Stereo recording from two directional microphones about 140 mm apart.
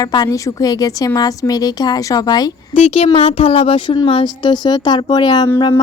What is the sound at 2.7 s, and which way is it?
Speech, 45° left (ahead or behind).